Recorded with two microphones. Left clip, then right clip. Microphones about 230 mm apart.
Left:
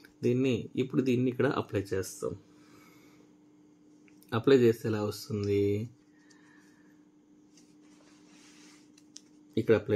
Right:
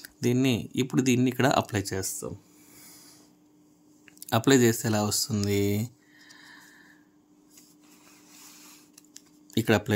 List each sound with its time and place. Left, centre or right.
0.0 s speech: right
4.3 s speech: right
9.5 s speech: right